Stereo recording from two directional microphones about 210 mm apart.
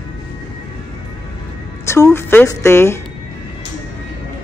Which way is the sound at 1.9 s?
15° left (ahead or behind).